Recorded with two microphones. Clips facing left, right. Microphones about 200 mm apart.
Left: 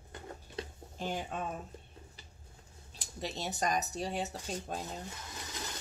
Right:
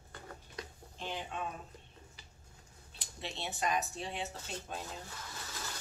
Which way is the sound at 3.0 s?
40° left (ahead or behind).